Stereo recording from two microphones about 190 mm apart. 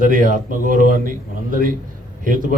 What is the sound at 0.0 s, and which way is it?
A man's voice, 45° right (ahead or behind).